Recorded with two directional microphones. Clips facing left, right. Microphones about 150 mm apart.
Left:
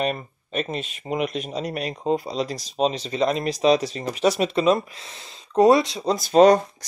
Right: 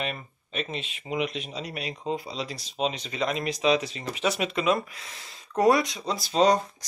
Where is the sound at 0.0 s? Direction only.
45° left (ahead or behind).